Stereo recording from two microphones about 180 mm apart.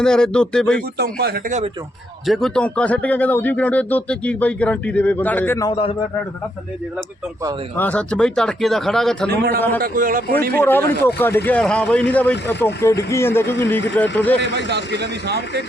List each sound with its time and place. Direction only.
0.0 s speech: 5° left (ahead or behind)
0.9 s speech: 60° right (ahead or behind)
2.2 s speech: centre (ahead or behind)
5.6 s a man's voice: 30° left (ahead or behind)
7.8 s speech: 10° left (ahead or behind)
9.3 s speech: 60° right (ahead or behind)
9.6 s speech: 10° left (ahead or behind)
9.8 s a man's voice: 50° right (ahead or behind)
10.5 s speech: 10° left (ahead or behind)
14.5 s speech: 70° right (ahead or behind)